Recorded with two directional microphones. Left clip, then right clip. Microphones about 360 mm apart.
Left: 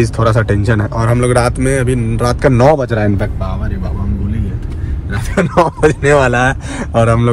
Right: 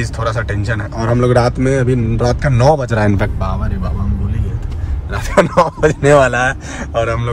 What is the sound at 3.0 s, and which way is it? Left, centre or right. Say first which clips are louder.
Speech: right 1 dB; left.